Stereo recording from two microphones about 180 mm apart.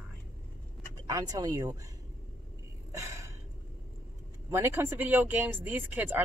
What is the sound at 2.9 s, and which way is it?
Gasp, 15° right (ahead or behind).